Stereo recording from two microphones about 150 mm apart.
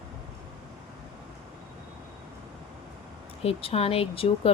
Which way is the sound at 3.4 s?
40° left (ahead or behind).